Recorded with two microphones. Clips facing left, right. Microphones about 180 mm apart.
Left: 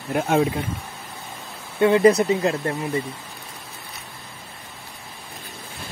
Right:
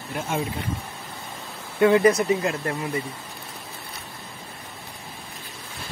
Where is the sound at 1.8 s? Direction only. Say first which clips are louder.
Left 2 dB; 25° left (ahead or behind).